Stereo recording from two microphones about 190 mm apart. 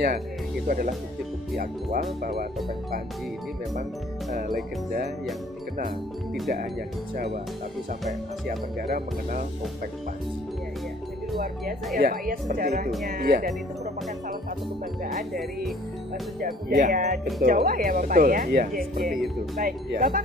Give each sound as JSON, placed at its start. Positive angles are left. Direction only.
{"t": 0.7, "sound": "speech", "side_deg": -45}
{"t": 4.3, "sound": "music", "side_deg": -40}
{"t": 8.8, "sound": "speech", "side_deg": -50}
{"t": 12.0, "sound": "speech", "side_deg": -50}
{"t": 16.3, "sound": "speech", "side_deg": -50}
{"t": 17.4, "sound": "speech", "side_deg": -50}
{"t": 19.1, "sound": "speech", "side_deg": 0}
{"t": 19.6, "sound": "speech", "side_deg": -50}